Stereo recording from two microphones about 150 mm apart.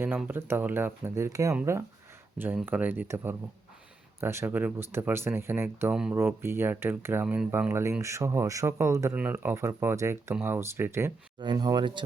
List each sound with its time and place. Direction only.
0.0 s speech: 15° right (ahead or behind)
11.3 s speech: 30° right (ahead or behind)